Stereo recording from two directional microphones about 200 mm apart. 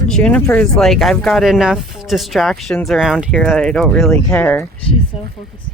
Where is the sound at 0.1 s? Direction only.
5° left (ahead or behind).